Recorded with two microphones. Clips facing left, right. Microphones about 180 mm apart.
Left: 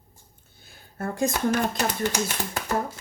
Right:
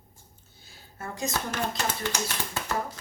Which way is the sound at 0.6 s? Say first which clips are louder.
Left 8 dB; 55° left (ahead or behind).